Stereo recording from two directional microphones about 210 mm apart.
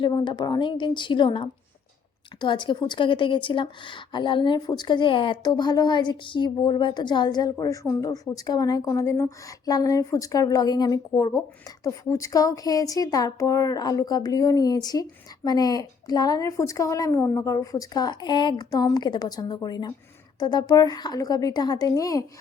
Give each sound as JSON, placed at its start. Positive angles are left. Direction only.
{"t": 0.0, "sound": "a woman's voice", "side_deg": 20}